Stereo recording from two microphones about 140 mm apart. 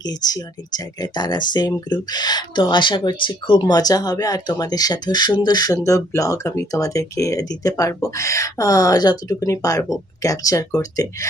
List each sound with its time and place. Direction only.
0.0 s speech: 30° left (ahead or behind)